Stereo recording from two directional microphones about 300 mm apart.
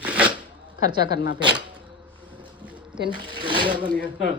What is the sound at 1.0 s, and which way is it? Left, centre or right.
Speech, left.